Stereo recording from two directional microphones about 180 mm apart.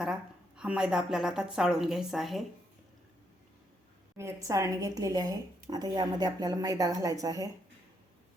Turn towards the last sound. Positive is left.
turn(degrees=-20)  # may be behind; listen again after turning